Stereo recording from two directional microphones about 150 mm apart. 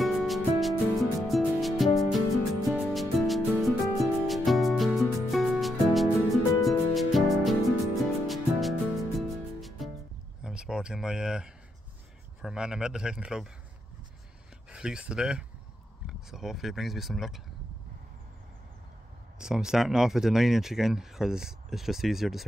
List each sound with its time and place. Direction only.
0.0 s music: centre (ahead or behind)
10.4 s a sound: 5° right (ahead or behind)
12.4 s speech: 5° right (ahead or behind)
14.7 s speech: 5° right (ahead or behind)
19.3 s speech: 5° right (ahead or behind)